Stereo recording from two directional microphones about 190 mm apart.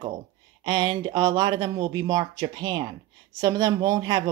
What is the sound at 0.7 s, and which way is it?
Speech, 25° right (ahead or behind).